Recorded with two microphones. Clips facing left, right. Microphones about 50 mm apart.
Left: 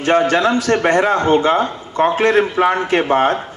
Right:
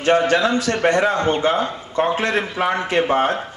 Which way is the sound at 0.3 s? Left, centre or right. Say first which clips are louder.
Left 3 dB; left.